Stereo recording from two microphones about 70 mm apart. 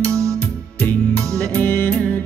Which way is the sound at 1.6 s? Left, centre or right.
Left.